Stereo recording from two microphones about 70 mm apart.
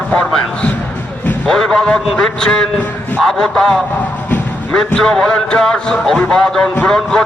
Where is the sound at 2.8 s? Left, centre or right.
Left.